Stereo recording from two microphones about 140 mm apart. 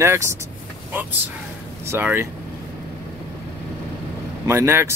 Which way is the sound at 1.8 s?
15° right (ahead or behind).